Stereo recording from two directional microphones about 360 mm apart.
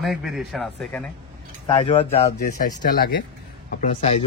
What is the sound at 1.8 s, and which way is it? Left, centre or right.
Speech, centre.